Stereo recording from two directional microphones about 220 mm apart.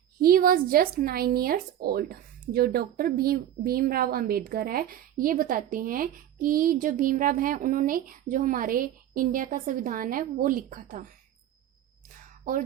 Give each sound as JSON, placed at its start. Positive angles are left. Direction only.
{"t": 0.2, "sound": "speech", "side_deg": -40}